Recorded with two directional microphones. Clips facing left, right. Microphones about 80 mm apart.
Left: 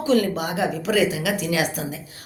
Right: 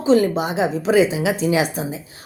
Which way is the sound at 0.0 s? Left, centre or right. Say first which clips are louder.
Right 4 dB; right.